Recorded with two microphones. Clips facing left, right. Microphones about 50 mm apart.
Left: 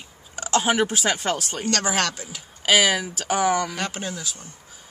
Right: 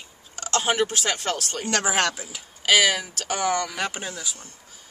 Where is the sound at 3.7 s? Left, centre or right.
Centre.